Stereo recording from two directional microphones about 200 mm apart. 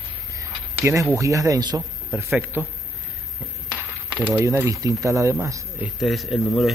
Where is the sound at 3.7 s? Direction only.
10° right (ahead or behind).